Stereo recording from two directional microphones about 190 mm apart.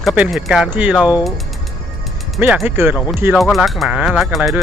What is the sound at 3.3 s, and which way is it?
Speech, centre (ahead or behind).